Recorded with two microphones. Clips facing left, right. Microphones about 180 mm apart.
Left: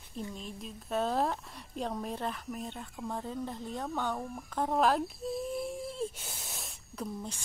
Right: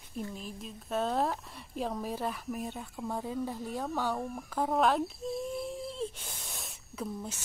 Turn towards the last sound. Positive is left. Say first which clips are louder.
# right 1 dB
turn(degrees=0)  # may be behind; listen again after turning